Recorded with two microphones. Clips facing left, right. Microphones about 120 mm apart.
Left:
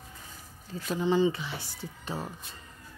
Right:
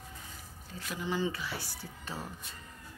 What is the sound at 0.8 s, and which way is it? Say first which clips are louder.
Speech: left 8 dB; 25° left (ahead or behind).